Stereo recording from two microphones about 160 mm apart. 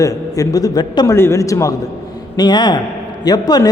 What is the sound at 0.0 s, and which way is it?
A man's voice, 20° left (ahead or behind).